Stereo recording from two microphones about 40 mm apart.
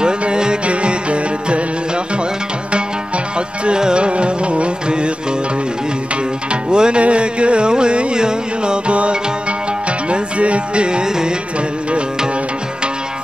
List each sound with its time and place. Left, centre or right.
0.0 s music: right
3.6 s music: right
6.7 s music: right
10.1 s music: right